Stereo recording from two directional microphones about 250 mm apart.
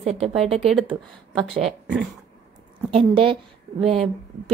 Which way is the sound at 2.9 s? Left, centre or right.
Right.